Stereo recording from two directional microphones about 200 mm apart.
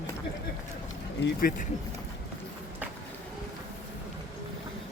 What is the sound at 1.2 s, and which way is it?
Speech, 60° left (ahead or behind).